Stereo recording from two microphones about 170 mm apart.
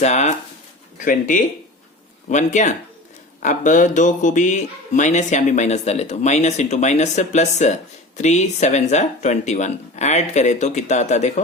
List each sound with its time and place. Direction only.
0.0 s speech: 40° left (ahead or behind)
2.3 s speech: 45° left (ahead or behind)